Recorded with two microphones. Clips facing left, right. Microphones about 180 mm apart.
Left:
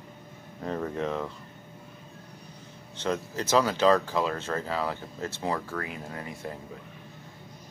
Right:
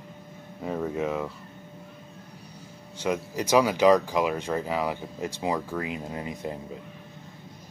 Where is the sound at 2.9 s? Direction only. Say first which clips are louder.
Right 2 dB; 10° right (ahead or behind).